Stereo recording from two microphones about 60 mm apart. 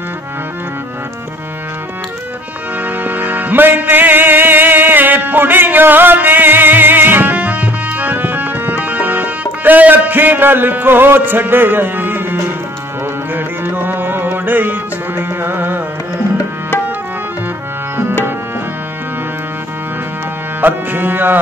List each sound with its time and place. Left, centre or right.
2.8 s music: right
20.6 s music: right